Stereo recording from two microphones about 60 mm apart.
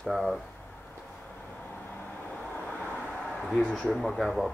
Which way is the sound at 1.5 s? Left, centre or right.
Left.